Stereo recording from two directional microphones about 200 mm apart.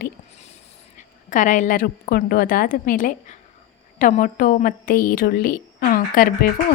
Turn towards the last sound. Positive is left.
turn(degrees=45)  # may be behind; listen again after turning